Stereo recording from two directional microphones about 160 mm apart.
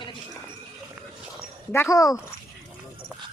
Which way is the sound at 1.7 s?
20° left (ahead or behind).